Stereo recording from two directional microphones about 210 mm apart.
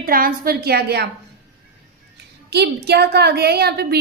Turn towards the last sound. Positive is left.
turn(degrees=-50)  # may be behind; listen again after turning